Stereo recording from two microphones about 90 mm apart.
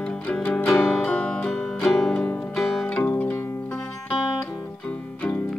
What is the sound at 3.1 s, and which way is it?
Zither, 20° left (ahead or behind).